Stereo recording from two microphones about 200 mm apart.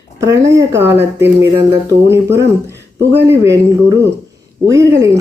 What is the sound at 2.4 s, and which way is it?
Speech, 15° right (ahead or behind).